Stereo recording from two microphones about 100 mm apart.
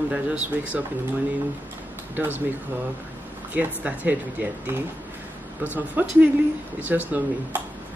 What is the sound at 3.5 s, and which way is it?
Speech, 15° right (ahead or behind).